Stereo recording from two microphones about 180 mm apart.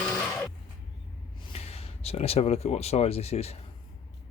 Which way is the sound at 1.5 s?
35° left (ahead or behind).